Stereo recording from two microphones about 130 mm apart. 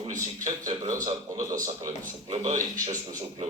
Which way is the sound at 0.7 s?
50° right (ahead or behind).